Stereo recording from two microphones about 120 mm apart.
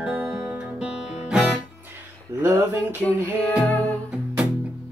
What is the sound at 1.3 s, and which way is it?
Music, centre (ahead or behind).